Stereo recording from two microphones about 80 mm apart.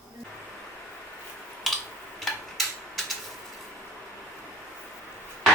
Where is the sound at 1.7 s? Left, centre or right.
Centre.